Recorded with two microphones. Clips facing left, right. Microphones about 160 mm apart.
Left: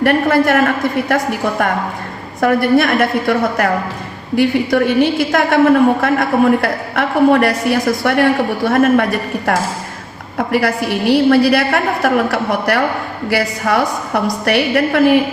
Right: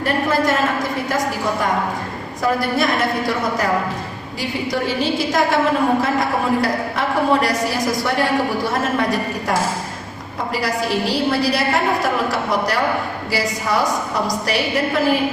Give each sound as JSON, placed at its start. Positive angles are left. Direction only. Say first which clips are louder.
{"t": 0.0, "sound": "a woman's voice", "louder": "left 6 dB", "side_deg": 65}